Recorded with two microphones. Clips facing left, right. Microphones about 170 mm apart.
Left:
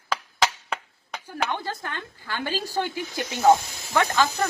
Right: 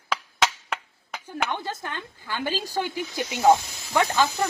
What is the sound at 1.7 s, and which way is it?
A woman's voice, 15° right (ahead or behind).